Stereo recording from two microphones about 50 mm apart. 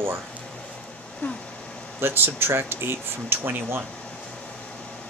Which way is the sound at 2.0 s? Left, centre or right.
Right.